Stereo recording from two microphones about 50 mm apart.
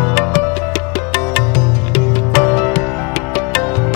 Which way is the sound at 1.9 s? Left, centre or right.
Centre.